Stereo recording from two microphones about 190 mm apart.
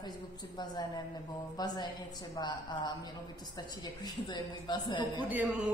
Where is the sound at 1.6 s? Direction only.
20° left (ahead or behind).